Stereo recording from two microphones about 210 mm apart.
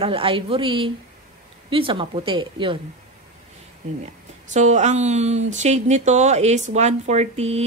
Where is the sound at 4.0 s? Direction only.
35° right (ahead or behind).